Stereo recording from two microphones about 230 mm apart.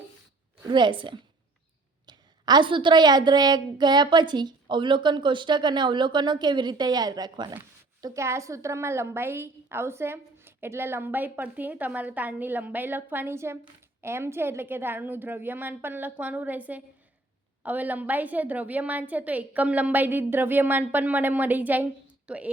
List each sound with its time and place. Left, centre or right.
0.6 s a woman's voice: centre